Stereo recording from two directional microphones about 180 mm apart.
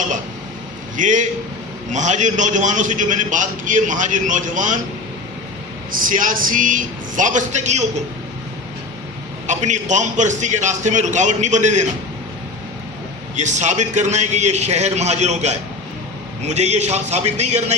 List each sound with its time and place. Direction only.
0.9 s a man's voice: 45° right (ahead or behind)
5.9 s a man's voice: 50° right (ahead or behind)
9.5 s a man's voice: 40° right (ahead or behind)
13.3 s a man's voice: 40° right (ahead or behind)